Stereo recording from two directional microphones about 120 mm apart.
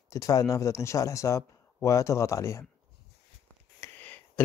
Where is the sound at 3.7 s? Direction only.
20° left (ahead or behind).